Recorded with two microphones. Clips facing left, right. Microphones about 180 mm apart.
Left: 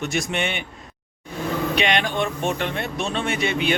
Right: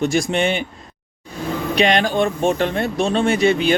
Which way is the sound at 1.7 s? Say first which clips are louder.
Right 9 dB; 35° right (ahead or behind).